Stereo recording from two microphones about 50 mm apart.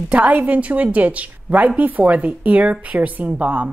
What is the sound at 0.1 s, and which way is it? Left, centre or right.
Speech, right.